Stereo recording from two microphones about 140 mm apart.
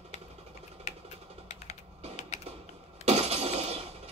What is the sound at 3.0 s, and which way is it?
Breaking, 50° right (ahead or behind).